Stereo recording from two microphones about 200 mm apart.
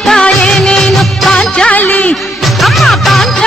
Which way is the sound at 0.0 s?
5° left (ahead or behind).